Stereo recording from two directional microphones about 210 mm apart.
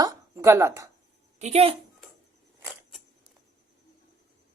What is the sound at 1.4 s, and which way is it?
Speech, 30° right (ahead or behind).